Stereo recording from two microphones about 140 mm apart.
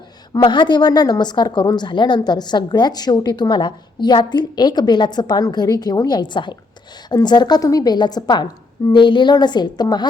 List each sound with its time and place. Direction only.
0.4 s a woman's voice: 35° left (ahead or behind)